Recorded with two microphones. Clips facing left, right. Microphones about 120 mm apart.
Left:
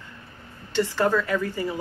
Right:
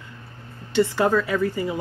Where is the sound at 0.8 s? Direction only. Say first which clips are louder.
Right 3 dB; 10° right (ahead or behind).